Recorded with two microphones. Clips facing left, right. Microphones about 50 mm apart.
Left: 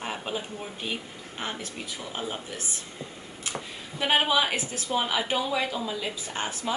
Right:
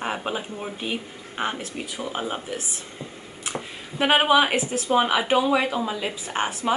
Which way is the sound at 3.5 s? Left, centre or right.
Right.